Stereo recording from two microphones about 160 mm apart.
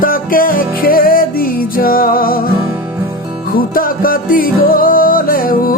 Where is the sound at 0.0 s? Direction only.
60° left (ahead or behind).